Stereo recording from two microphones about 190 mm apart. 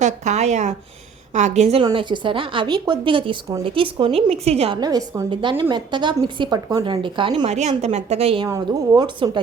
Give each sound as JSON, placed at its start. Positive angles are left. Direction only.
{"t": 0.0, "sound": "a sound", "side_deg": -35}
{"t": 1.3, "sound": "a woman's voice", "side_deg": -40}
{"t": 1.8, "sound": "a woman's voice", "side_deg": -25}
{"t": 4.8, "sound": "a woman's voice", "side_deg": -20}